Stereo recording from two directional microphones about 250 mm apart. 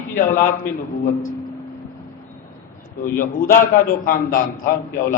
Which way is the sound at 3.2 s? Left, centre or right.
Left.